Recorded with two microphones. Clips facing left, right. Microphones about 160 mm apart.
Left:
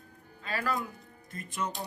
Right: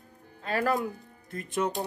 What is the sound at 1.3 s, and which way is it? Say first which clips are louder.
Speech: right 6 dB; 70° right (ahead or behind).